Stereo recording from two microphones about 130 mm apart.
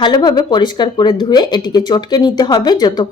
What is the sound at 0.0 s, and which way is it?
Speech, 35° left (ahead or behind).